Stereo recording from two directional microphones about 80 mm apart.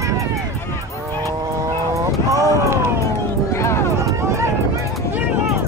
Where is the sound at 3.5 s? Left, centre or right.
Left.